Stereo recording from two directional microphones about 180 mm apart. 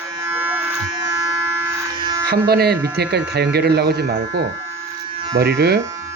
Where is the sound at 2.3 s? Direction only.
60° right (ahead or behind).